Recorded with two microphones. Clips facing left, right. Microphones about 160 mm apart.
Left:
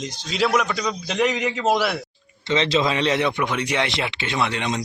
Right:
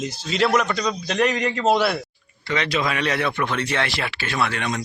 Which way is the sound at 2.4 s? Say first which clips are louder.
Left 3 dB; 25° left (ahead or behind).